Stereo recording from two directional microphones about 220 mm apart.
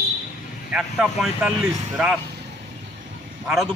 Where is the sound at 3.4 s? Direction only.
Centre (ahead or behind).